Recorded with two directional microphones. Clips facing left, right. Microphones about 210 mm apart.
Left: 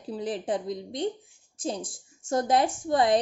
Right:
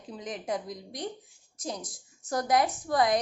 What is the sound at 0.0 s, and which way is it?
A woman's voice, 35° left (ahead or behind).